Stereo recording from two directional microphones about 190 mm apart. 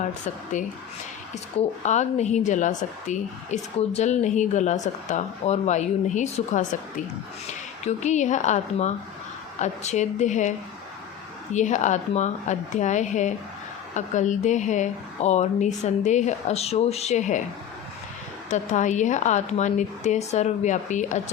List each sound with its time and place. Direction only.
0.0 s a woman's voice: 40° left (ahead or behind)
1.8 s a woman's voice: 40° left (ahead or behind)
11.5 s a woman's voice: 40° left (ahead or behind)
18.5 s a woman's voice: 40° left (ahead or behind)